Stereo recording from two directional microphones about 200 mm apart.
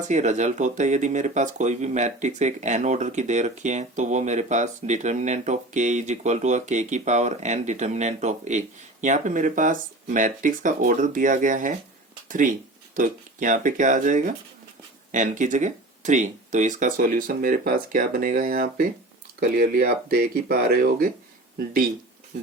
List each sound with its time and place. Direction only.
0.1 s speech: 35° right (ahead or behind)